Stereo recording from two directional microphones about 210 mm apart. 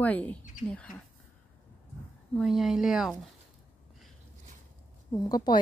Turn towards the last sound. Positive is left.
turn(degrees=20)  # may be behind; listen again after turning